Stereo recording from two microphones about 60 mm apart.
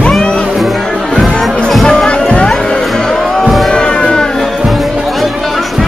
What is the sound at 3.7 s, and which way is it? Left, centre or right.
Music, centre.